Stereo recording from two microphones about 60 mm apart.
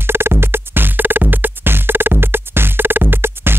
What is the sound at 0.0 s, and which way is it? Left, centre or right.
Music, right.